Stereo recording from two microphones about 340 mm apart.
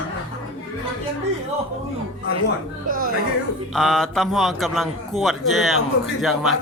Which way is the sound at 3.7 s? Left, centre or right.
Centre.